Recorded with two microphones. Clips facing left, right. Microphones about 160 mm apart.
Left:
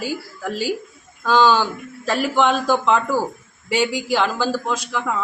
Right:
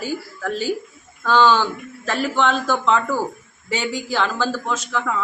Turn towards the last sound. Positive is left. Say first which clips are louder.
# even
turn(degrees=10)  # may be behind; listen again after turning